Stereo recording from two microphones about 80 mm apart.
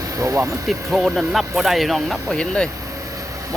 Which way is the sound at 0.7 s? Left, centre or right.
Centre.